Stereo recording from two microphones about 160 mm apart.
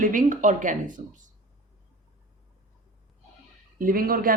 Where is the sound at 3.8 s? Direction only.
65° right (ahead or behind).